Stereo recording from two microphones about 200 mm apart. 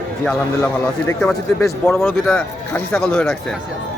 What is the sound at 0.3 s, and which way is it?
A man's voice, 10° left (ahead or behind).